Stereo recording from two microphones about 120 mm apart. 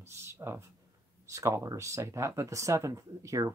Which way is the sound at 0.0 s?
20° right (ahead or behind).